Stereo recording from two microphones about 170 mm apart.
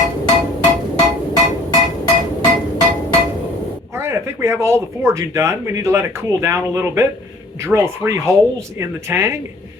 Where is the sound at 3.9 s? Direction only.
15° right (ahead or behind).